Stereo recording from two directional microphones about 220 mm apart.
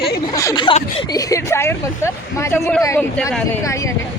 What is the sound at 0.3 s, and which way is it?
Speech, 15° left (ahead or behind).